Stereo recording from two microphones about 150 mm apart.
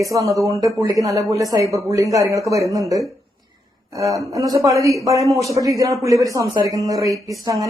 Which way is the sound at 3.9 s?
20° right (ahead or behind).